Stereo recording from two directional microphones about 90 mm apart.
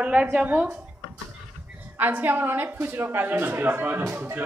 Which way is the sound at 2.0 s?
20° right (ahead or behind).